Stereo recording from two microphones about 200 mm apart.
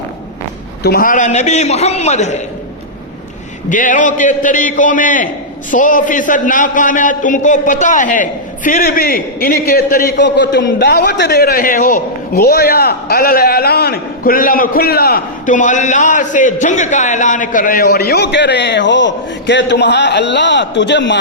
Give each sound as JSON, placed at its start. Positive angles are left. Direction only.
{"t": 0.8, "sound": "a man's voice", "side_deg": 50}
{"t": 3.7, "sound": "a man's voice", "side_deg": 40}